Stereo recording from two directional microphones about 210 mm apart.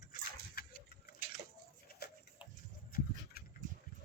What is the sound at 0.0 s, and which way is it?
Dog, 45° left (ahead or behind).